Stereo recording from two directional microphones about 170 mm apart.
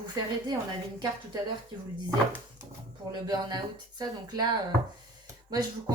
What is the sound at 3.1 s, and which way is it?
Speech, 25° right (ahead or behind).